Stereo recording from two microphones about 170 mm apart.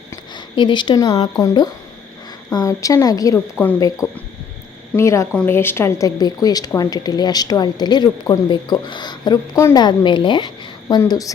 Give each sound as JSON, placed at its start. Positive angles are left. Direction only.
{"t": 0.3, "sound": "speech", "side_deg": 25}
{"t": 4.9, "sound": "speech", "side_deg": 15}